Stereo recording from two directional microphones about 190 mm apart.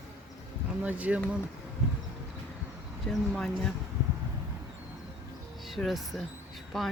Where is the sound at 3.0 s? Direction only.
Centre (ahead or behind).